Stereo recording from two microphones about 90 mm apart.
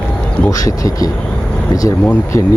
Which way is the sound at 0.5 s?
40° left (ahead or behind).